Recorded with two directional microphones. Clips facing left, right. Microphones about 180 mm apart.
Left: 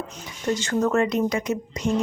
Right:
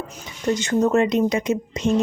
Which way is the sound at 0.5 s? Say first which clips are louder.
Right 3 dB; 20° right (ahead or behind).